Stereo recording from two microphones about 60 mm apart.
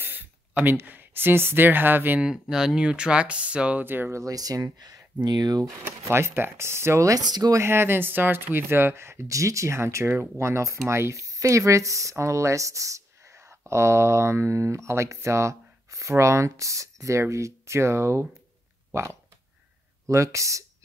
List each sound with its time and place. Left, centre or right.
0.0 s a sound: right
0.8 s speech: right
2.5 s speech: centre
3.8 s speech: right
4.1 s speech: right
5.5 s speech: right
6.0 s speech: right
7.1 s speech: right
7.6 s speech: right
9.3 s speech: right
20.1 s speech: right